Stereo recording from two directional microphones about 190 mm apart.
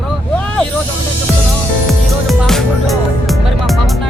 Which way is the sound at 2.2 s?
Centre (ahead or behind).